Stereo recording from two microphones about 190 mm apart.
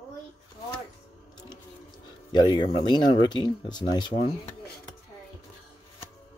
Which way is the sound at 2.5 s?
25° left (ahead or behind).